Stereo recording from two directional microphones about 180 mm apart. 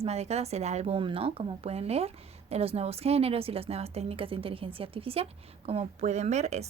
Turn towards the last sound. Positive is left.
turn(degrees=-40)  # may be behind; listen again after turning